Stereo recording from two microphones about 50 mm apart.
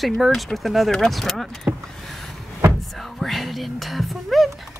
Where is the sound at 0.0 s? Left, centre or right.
Centre.